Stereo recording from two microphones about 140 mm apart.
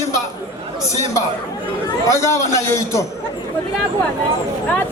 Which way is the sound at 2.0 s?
20° left (ahead or behind).